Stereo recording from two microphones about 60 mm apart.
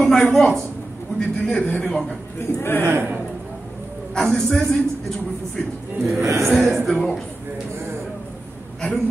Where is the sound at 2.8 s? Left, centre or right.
Right.